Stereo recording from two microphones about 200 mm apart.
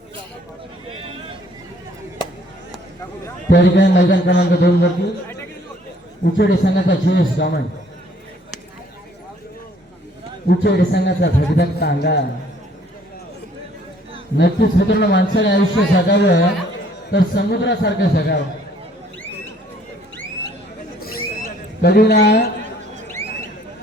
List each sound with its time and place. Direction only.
3.5 s a man's voice: 60° left (ahead or behind)
6.2 s a man's voice: 55° left (ahead or behind)
10.4 s a man's voice: 55° left (ahead or behind)
14.3 s a man's voice: 60° left (ahead or behind)
21.8 s a man's voice: 55° left (ahead or behind)
23.0 s a sound: 10° left (ahead or behind)